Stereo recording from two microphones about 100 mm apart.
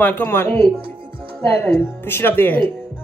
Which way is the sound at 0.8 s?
65° right (ahead or behind).